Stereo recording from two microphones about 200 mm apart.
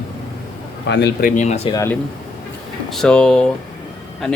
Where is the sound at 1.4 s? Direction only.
30° left (ahead or behind).